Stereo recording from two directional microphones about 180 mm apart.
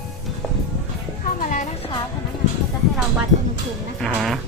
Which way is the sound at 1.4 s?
45° left (ahead or behind).